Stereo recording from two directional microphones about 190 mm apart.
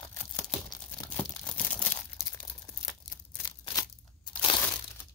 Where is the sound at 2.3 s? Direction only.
15° left (ahead or behind).